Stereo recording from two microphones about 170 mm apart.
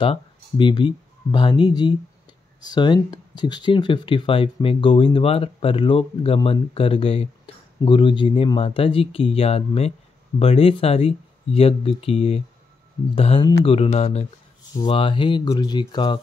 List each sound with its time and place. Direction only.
0.0 s speech: 30° left (ahead or behind)